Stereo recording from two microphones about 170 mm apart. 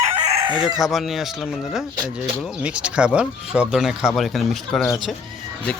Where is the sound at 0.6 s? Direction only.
Centre (ahead or behind).